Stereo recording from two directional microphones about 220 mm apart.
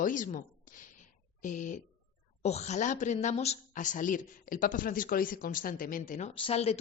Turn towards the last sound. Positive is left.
turn(degrees=30)  # may be behind; listen again after turning